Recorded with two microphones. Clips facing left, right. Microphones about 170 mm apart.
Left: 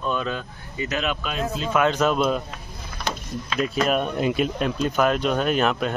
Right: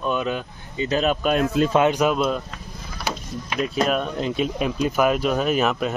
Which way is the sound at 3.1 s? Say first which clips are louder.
Right 1 dB; 10° right (ahead or behind).